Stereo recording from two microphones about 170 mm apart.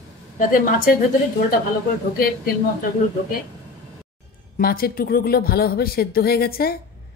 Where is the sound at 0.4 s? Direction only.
55° left (ahead or behind).